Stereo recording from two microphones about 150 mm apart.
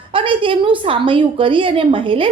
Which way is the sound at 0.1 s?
35° right (ahead or behind).